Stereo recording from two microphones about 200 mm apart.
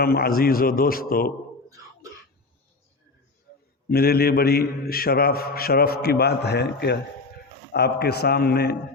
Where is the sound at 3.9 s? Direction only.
50° left (ahead or behind).